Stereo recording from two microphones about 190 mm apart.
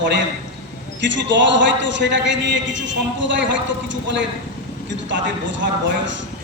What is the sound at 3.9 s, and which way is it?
Speech, 70° right (ahead or behind).